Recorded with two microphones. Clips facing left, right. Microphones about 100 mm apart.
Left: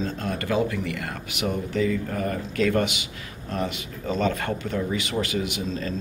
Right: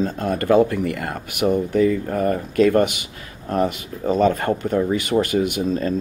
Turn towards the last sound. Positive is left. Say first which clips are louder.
# right 8 dB
turn(degrees=-50)  # may be behind; listen again after turning